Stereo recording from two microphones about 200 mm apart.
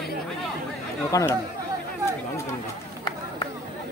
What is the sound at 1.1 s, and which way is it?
Speech, 15° left (ahead or behind).